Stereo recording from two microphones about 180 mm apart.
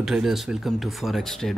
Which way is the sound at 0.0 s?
Centre (ahead or behind).